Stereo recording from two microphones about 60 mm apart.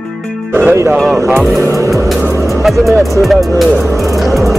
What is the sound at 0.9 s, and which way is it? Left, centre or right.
Music, centre.